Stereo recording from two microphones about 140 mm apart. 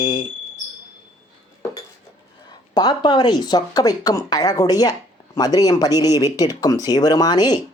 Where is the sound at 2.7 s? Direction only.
30° left (ahead or behind).